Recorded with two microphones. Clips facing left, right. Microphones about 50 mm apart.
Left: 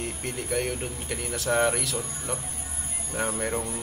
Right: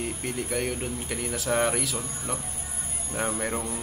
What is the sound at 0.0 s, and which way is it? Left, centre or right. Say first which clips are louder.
Speech: right 2 dB; centre.